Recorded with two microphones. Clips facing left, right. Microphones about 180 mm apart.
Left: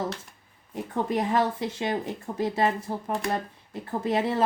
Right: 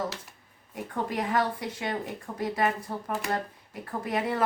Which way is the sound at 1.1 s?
25° left (ahead or behind).